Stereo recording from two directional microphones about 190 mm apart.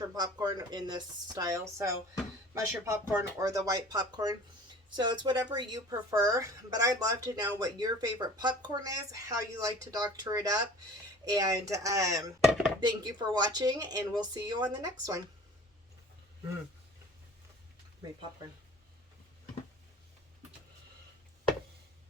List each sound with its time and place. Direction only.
0.2 s a woman's voice: 20° right (ahead or behind)